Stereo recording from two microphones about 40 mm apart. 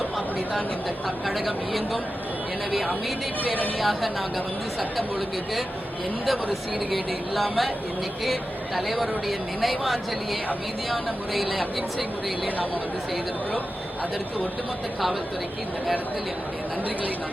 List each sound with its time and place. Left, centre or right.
1.0 s speech: centre
3.8 s speech: centre
6.2 s speech: centre